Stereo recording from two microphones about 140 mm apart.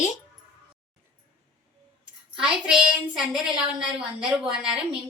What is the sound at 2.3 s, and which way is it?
A woman's voice, 5° right (ahead or behind).